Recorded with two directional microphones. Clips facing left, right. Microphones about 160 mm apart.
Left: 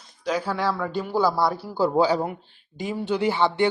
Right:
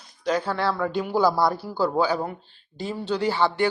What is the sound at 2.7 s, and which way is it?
Speech, 15° left (ahead or behind).